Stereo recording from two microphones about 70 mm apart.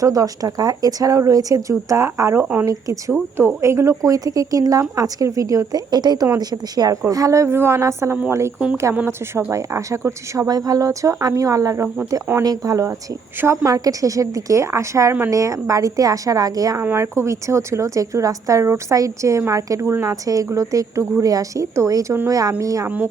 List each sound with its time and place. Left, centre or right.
0.0 s speech: right
2.1 s speech: right
2.6 s a woman's voice: right
3.1 s speech: right
5.9 s a woman's voice: right
6.3 s a woman's voice: right
7.1 s a woman's voice: right
8.5 s speech: centre
9.5 s a woman's voice: right
10.4 s a woman's voice: right
13.4 s speech: right
13.7 s a woman's voice: right
16.8 s a woman's voice: right